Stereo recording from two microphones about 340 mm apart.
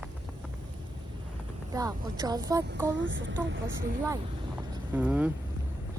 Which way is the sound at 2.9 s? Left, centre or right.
Right.